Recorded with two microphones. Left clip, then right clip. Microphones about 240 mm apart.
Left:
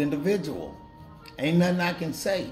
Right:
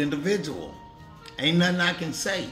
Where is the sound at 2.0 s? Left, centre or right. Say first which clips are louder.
Left 1 dB; centre.